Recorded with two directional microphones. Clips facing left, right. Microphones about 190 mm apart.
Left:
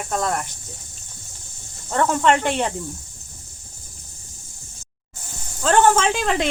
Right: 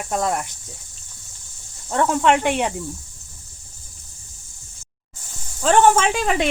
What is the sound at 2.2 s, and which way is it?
Cricket, 10° right (ahead or behind).